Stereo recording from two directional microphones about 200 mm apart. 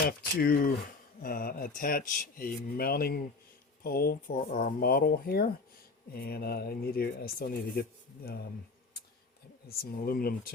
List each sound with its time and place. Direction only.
0.2 s speech: 50° left (ahead or behind)
9.6 s speech: 50° left (ahead or behind)